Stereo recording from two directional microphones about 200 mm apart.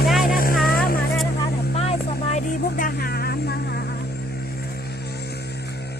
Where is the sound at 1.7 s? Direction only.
35° left (ahead or behind).